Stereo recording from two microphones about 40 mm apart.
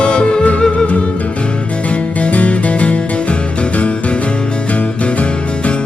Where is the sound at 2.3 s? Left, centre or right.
Left.